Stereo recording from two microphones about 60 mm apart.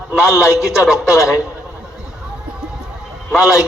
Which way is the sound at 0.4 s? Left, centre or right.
Left.